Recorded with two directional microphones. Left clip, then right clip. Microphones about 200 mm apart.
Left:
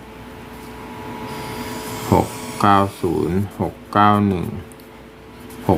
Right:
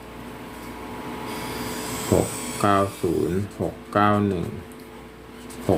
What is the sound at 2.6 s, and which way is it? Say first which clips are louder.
Speech: left 5 dB; 30° left (ahead or behind).